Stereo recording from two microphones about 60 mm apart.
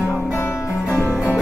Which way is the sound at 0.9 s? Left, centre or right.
Left.